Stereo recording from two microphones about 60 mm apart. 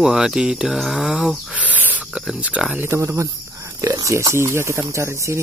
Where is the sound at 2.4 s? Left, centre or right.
Right.